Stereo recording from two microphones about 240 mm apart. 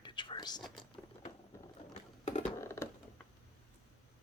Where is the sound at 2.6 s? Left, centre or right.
Centre.